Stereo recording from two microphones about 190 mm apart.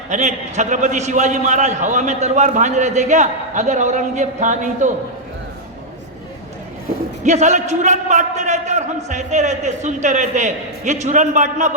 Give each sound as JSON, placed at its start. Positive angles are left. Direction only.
{"t": 0.1, "sound": "a man's voice", "side_deg": -40}
{"t": 7.3, "sound": "a man's voice", "side_deg": -35}